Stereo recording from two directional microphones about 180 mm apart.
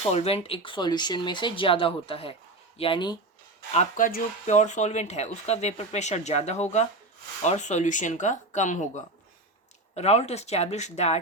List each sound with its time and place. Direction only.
0.1 s speech: 35° left (ahead or behind)
3.7 s speech: 40° left (ahead or behind)
9.9 s speech: 35° left (ahead or behind)